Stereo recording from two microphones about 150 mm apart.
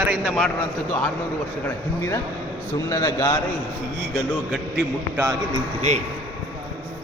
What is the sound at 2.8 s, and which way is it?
Speech, 20° left (ahead or behind).